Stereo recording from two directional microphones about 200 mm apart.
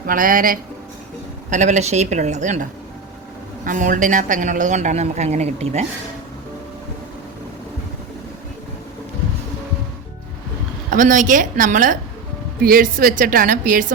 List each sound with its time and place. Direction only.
0.1 s a woman's voice: 45° right (ahead or behind)
10.9 s a woman's voice: 40° right (ahead or behind)